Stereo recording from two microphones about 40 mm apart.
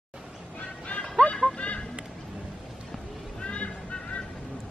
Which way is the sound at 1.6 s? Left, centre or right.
Left.